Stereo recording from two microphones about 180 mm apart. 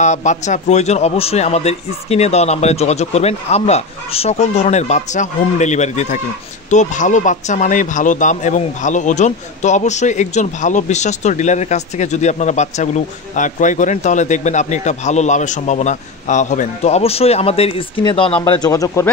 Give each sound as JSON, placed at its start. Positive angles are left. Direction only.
{"t": 0.0, "sound": "speech", "side_deg": 40}
{"t": 18.4, "sound": "speech", "side_deg": 20}